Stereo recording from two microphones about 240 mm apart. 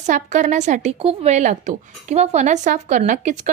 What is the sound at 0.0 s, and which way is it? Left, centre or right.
Speech, right.